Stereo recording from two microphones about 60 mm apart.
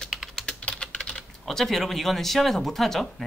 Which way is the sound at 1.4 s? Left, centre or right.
Centre.